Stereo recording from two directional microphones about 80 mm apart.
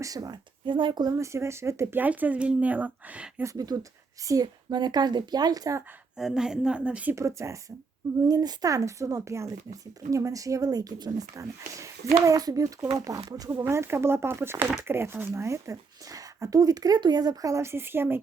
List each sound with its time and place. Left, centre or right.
0.0 s speech: right
0.6 s speech: right
1.1 s speech: right
2.0 s a woman's voice: right
3.4 s a woman's voice: right
6.1 s a woman's voice: centre
7.2 s speech: right
8.3 s speech: right
13.7 s a woman's voice: right
17.5 s a woman's voice: right